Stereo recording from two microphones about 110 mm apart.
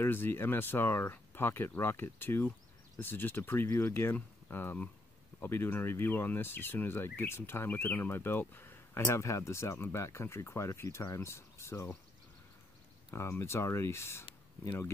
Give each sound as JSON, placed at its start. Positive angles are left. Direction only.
{"t": 0.0, "sound": "speech", "side_deg": 20}
{"t": 13.1, "sound": "speech", "side_deg": 25}